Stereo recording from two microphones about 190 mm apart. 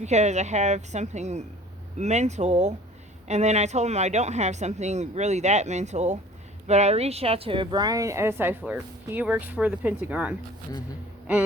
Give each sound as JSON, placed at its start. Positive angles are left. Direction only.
{"t": 0.0, "sound": "a woman's voice", "side_deg": -35}